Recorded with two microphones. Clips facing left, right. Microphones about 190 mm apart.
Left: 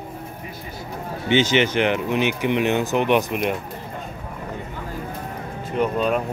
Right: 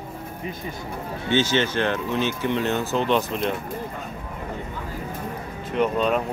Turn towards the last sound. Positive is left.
turn(degrees=5)  # may be behind; listen again after turning